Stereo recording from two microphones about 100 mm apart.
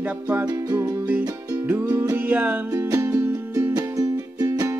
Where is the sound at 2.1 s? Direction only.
20° right (ahead or behind).